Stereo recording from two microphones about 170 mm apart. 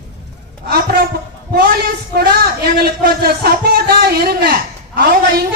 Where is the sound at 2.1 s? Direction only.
65° right (ahead or behind).